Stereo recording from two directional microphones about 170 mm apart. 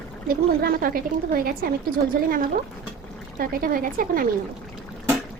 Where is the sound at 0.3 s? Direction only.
60° right (ahead or behind).